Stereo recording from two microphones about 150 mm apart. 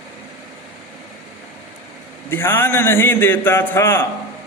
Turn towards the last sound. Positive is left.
turn(degrees=15)  # may be behind; listen again after turning